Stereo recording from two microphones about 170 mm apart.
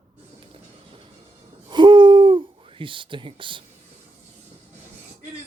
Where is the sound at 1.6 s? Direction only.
30° right (ahead or behind).